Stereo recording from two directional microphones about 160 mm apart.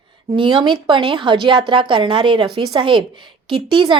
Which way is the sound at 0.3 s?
30° right (ahead or behind).